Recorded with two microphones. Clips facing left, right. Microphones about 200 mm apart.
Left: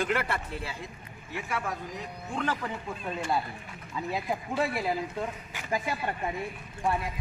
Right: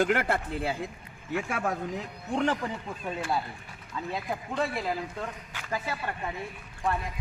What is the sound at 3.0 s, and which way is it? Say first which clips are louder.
Speech: even; 5° right (ahead or behind).